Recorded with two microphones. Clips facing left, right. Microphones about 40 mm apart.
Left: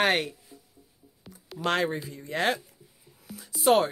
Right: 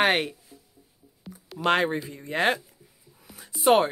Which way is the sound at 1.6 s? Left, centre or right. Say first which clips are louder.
Right 4 dB; right.